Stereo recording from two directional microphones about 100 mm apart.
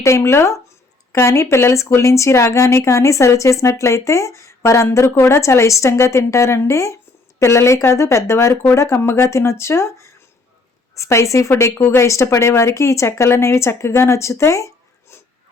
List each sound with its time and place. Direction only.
0.0 s speech: 25° left (ahead or behind)